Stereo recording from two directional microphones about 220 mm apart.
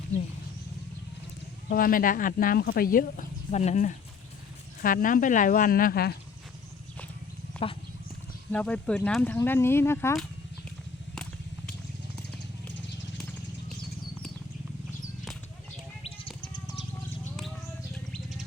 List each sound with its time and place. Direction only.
1.7 s speech: 40° left (ahead or behind)
7.6 s a sound: 5° left (ahead or behind)
8.5 s speech: 5° left (ahead or behind)
16.0 s chirp: 25° left (ahead or behind)
18.1 s bird: centre (ahead or behind)